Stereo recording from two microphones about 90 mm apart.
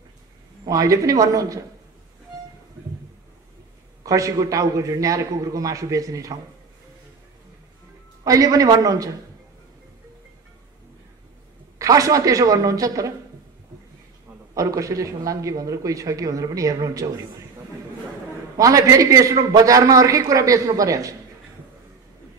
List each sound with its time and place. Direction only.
0.7 s a man's voice: 40° right (ahead or behind)
4.0 s a man's voice: 40° right (ahead or behind)
8.2 s a man's voice: 40° right (ahead or behind)
11.8 s a man's voice: 40° right (ahead or behind)
14.5 s a man's voice: 40° right (ahead or behind)
18.6 s a man's voice: 40° right (ahead or behind)